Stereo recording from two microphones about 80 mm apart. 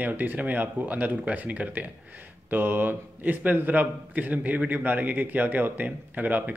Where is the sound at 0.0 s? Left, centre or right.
Right.